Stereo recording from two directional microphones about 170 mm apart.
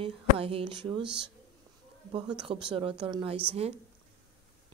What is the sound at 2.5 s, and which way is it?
Speech, 30° right (ahead or behind).